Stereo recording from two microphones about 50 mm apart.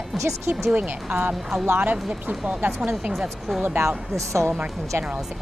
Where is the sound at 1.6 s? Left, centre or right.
Right.